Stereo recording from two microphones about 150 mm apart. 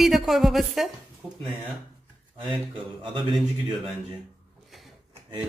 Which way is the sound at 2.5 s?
30° right (ahead or behind).